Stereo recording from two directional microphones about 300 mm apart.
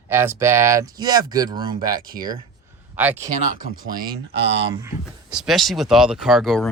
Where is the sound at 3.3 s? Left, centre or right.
Right.